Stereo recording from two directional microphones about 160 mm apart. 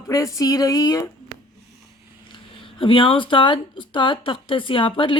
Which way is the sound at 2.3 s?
30° left (ahead or behind).